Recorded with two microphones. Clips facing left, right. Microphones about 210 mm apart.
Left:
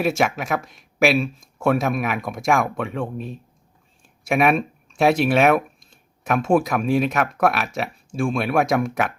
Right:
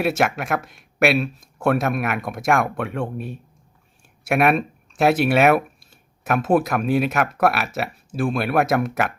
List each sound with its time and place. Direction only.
0.0 s speech: centre (ahead or behind)